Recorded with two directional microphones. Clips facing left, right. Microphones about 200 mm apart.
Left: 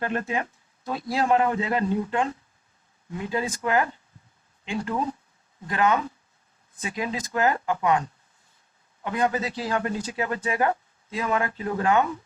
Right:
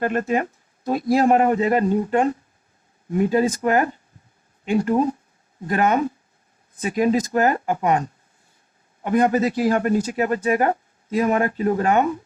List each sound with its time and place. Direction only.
0.0 s speech: 45° right (ahead or behind)